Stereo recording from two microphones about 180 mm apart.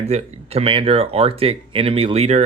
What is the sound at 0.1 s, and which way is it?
Speech, 35° right (ahead or behind).